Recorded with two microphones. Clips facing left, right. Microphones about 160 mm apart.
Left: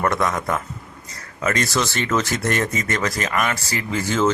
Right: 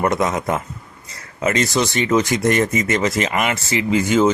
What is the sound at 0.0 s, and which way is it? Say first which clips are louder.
Speech: right 2 dB; 20° right (ahead or behind).